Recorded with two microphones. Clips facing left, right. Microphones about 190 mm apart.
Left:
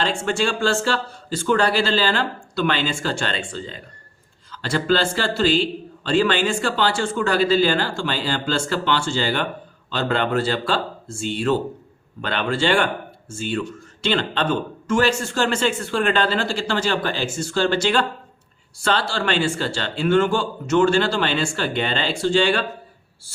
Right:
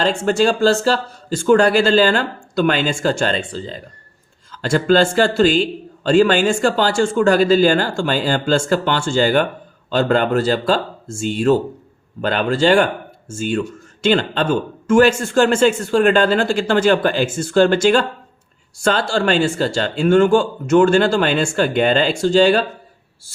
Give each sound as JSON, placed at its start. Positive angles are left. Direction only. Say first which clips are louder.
{"t": 0.0, "sound": "speech", "louder": "right 6 dB", "side_deg": -40}